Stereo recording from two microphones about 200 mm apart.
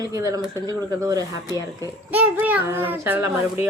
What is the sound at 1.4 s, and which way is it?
Speech, 20° left (ahead or behind).